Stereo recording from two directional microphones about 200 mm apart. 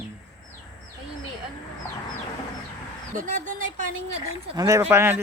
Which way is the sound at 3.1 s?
40° right (ahead or behind).